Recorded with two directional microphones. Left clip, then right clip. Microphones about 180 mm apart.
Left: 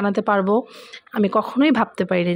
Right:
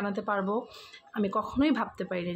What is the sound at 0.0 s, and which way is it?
Speech, 50° left (ahead or behind).